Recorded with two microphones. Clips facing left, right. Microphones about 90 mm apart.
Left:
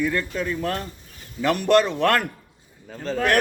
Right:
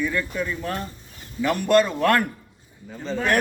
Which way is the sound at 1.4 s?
70° left (ahead or behind).